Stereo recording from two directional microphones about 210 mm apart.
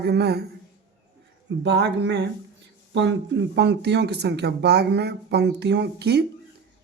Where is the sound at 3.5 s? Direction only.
55° right (ahead or behind).